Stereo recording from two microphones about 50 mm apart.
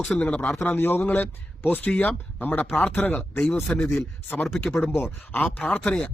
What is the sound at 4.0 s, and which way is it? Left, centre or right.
Speech, left.